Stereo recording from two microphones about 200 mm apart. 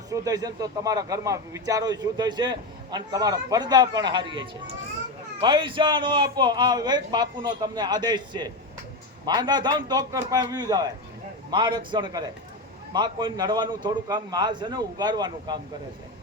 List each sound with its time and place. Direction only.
0.1 s a man's voice: 20° right (ahead or behind)